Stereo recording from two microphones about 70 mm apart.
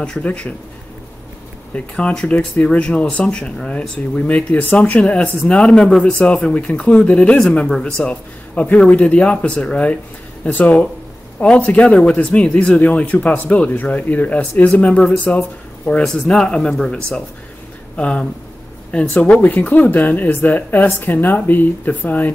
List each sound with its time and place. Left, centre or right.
0.0 s speech: centre
2.0 s a man's voice: centre
16.0 s a man's voice: centre; by 22.3 s left